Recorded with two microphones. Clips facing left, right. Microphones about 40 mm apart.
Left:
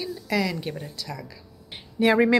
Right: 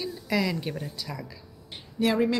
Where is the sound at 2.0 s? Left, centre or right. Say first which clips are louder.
Left 5 dB; centre.